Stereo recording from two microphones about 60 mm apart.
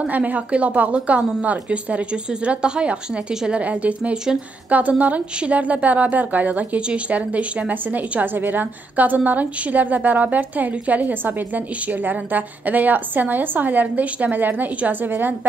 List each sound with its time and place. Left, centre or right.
0.0 s a woman's voice: right